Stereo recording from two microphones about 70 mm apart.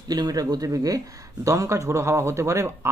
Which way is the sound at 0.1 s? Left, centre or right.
Right.